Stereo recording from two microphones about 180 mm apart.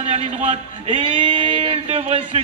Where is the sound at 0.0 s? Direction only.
35° right (ahead or behind).